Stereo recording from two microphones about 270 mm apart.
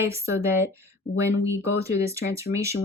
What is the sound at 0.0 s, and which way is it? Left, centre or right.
Speech, centre.